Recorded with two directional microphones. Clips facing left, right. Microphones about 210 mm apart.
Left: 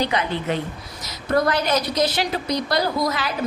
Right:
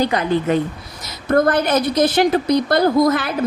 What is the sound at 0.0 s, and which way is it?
A woman's voice, 45° right (ahead or behind).